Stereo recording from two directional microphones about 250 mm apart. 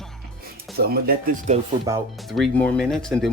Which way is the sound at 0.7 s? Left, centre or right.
Right.